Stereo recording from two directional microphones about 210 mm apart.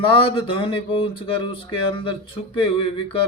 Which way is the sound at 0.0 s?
25° left (ahead or behind).